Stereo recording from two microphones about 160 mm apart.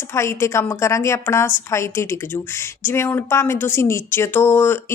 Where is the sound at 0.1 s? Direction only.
15° left (ahead or behind).